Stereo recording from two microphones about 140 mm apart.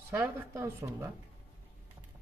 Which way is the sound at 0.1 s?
15° right (ahead or behind).